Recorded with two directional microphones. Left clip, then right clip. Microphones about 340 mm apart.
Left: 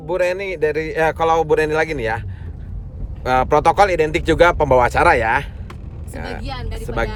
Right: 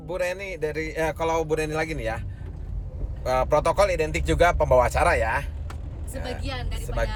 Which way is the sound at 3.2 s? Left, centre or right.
Left.